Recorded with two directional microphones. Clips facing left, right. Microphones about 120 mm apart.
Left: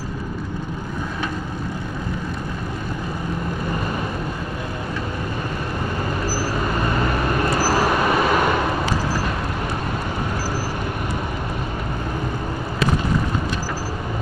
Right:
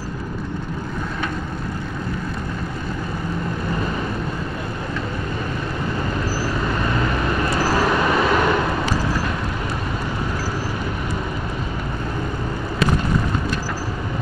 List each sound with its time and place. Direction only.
6.6 s vehicle: 15° left (ahead or behind)
7.1 s vehicle: 30° left (ahead or behind)
7.6 s vehicle: 5° left (ahead or behind)